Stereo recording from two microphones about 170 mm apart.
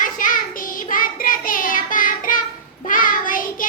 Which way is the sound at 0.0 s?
50° left (ahead or behind).